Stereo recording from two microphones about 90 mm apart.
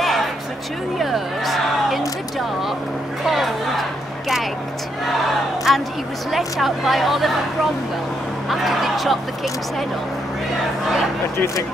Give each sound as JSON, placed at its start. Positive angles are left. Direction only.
{"t": 0.9, "sound": "a sound", "side_deg": 0}
{"t": 3.3, "sound": "music", "side_deg": 0}
{"t": 5.7, "sound": "a sound", "side_deg": -5}
{"t": 6.3, "sound": "speech", "side_deg": 0}
{"t": 8.5, "sound": "speech", "side_deg": 0}
{"t": 11.3, "sound": "speech", "side_deg": 30}